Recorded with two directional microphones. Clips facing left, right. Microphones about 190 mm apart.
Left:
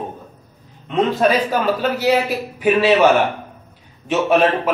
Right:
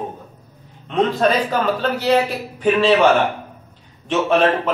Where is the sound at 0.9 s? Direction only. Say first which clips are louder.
Left 1 dB; 10° left (ahead or behind).